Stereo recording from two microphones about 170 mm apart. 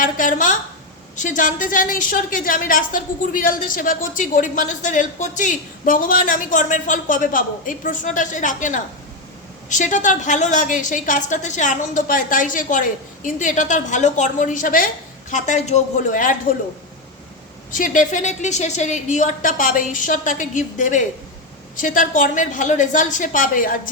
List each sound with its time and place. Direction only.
0.0 s a woman's voice: 50° left (ahead or behind)
17.7 s a woman's voice: 50° left (ahead or behind)